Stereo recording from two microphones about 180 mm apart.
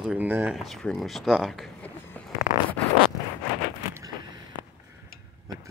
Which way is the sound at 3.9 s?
20° right (ahead or behind).